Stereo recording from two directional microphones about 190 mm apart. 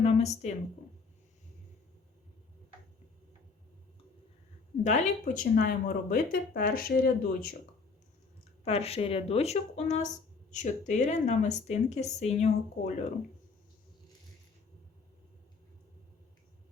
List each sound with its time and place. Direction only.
0.0 s a sound: 35° left (ahead or behind)
4.8 s speech: 40° left (ahead or behind)
8.6 s speech: 30° left (ahead or behind)